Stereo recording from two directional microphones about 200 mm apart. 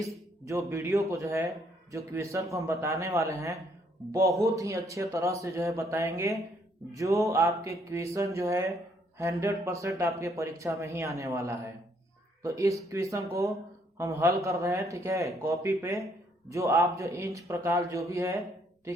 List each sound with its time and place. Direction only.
0.0 s speech: 15° right (ahead or behind)